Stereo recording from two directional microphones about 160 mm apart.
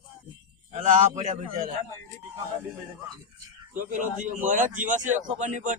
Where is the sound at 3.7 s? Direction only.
55° right (ahead or behind).